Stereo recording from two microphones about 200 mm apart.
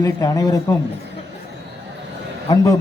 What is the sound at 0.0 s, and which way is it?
Speech, 20° left (ahead or behind).